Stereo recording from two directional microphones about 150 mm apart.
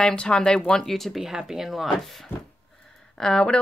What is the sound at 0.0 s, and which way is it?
Speech, 5° left (ahead or behind).